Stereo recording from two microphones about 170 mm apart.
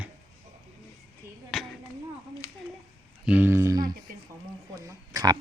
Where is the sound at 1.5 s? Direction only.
Centre (ahead or behind).